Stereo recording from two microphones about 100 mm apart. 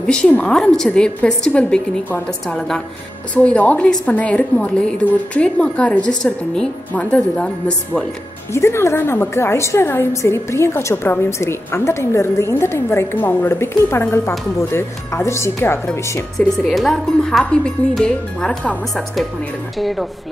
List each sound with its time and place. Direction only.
0.0 s a woman's voice: 10° left (ahead or behind)
3.3 s a woman's voice: 15° left (ahead or behind)
8.5 s a woman's voice: 25° left (ahead or behind)
16.3 s speech: 5° left (ahead or behind)